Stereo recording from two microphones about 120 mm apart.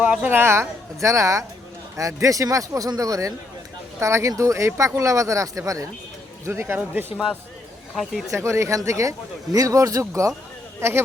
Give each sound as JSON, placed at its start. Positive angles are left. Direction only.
{"t": 0.0, "sound": "speech", "side_deg": -10}
{"t": 8.3, "sound": "speech", "side_deg": -25}